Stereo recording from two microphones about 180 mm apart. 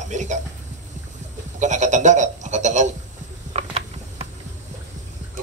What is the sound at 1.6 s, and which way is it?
Sheep, 40° right (ahead or behind).